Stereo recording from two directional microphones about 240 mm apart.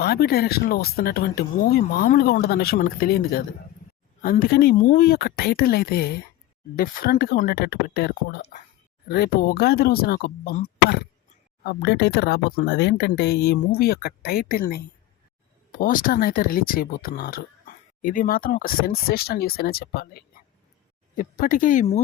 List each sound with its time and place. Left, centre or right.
0.0 s speech: left